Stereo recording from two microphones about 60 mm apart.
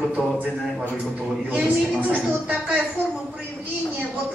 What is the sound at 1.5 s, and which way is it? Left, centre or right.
A woman's voice, right.